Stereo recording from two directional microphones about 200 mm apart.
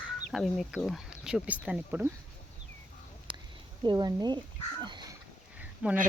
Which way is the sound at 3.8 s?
20° right (ahead or behind).